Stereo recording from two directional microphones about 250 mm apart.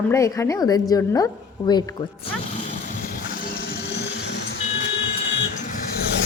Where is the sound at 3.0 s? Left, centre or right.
Left.